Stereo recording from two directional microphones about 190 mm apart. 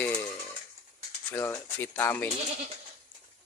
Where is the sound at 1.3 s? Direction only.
10° left (ahead or behind).